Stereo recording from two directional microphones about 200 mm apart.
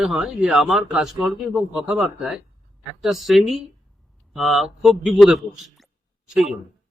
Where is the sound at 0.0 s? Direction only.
Centre (ahead or behind).